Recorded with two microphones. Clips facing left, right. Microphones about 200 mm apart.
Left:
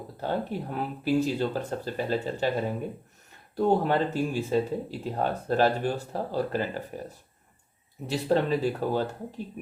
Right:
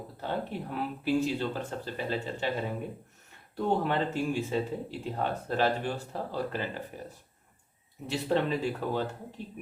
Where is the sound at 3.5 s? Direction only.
40° left (ahead or behind).